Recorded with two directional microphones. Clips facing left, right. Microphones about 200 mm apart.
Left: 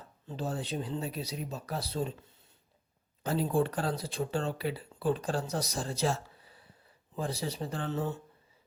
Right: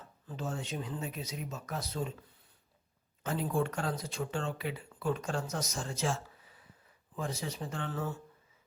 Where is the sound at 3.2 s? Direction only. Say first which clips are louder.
Left 4 dB; 35° left (ahead or behind).